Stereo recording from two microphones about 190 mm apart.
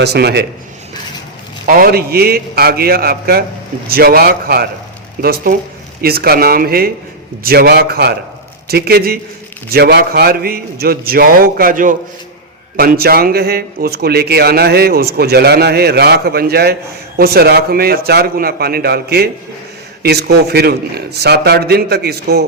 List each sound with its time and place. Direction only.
0.0 s a man's voice: 60° right (ahead or behind)
1.6 s a man's voice: 50° right (ahead or behind)